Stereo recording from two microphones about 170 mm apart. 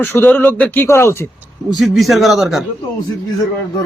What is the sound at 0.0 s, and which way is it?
Speech, 10° left (ahead or behind).